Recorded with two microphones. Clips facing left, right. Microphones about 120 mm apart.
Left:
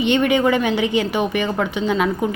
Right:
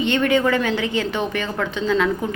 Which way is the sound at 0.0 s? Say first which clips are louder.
Left 2 dB; 15° left (ahead or behind).